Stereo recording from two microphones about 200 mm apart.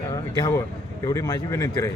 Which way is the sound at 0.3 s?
20° left (ahead or behind).